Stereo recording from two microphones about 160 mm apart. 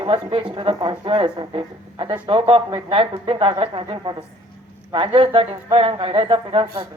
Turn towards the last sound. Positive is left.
turn(degrees=-30)  # may be behind; listen again after turning